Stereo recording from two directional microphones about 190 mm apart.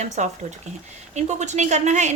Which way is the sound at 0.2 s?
40° right (ahead or behind).